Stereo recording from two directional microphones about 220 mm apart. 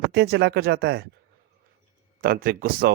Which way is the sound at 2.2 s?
40° right (ahead or behind).